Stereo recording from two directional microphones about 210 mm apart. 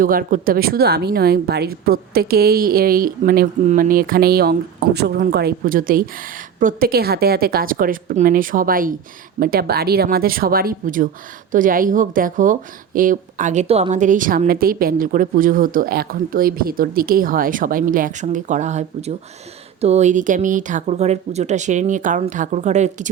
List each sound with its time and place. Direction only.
0.0 s a woman's voice: 40° right (ahead or behind)